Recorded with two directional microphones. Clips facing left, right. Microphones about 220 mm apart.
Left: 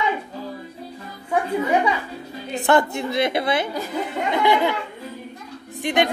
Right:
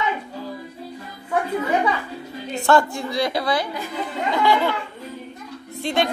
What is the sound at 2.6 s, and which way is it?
A woman's voice, 20° left (ahead or behind).